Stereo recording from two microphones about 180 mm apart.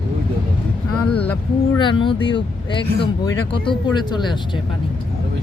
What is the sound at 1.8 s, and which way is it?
Speech, 25° left (ahead or behind).